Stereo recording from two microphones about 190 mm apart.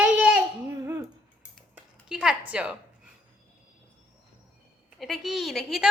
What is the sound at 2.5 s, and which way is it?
Speech, 5° right (ahead or behind).